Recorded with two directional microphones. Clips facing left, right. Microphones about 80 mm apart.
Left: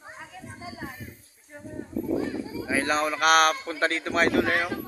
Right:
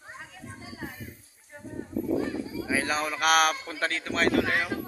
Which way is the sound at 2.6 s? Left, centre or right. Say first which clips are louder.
Left 4 dB; centre.